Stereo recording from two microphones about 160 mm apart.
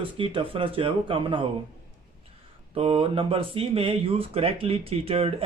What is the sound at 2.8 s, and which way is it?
Speech, 40° right (ahead or behind).